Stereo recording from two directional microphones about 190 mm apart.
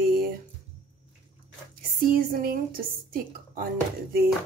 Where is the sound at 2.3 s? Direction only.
50° right (ahead or behind).